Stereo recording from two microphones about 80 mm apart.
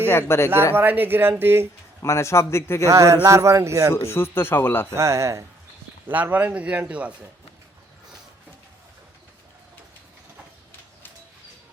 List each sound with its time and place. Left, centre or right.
0.0 s a man's voice: left
0.5 s speech: right
2.0 s a man's voice: left
2.8 s a man's voice: right
4.0 s speech: left
4.9 s a man's voice: right
6.1 s a man's voice: right